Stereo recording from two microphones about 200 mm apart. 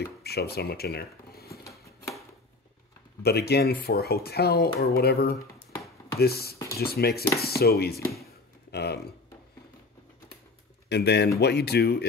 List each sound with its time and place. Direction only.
0.0 s a sound: 55° left (ahead or behind)
3.2 s speech: 55° left (ahead or behind)
10.9 s speech: 55° left (ahead or behind)